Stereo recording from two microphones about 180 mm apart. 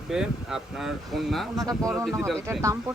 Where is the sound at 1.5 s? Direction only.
20° right (ahead or behind).